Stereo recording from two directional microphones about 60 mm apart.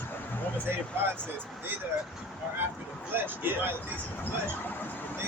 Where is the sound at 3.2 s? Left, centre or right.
Right.